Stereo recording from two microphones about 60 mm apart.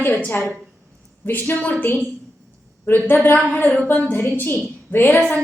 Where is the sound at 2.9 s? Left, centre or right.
Left.